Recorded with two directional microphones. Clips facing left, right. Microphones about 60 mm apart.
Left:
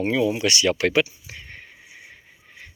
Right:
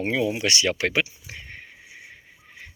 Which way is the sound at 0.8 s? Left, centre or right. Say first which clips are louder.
Left 4 dB; right.